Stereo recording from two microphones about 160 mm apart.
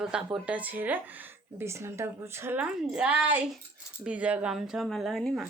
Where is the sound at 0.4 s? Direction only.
10° right (ahead or behind).